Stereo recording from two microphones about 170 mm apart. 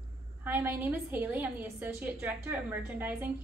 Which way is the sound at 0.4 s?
10° right (ahead or behind).